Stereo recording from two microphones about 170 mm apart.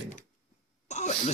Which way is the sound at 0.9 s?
45° left (ahead or behind).